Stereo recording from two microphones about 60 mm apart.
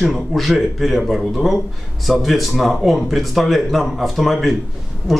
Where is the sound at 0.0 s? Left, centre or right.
Centre.